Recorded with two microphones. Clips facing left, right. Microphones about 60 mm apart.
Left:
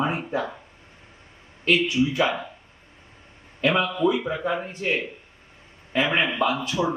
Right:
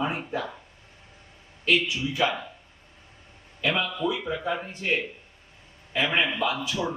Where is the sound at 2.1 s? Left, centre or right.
Centre.